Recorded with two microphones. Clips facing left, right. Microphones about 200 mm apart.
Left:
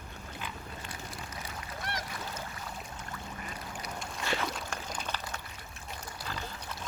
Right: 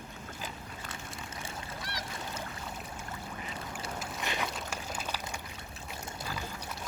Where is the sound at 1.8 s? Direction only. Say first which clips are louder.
Left 7 dB; 50° left (ahead or behind).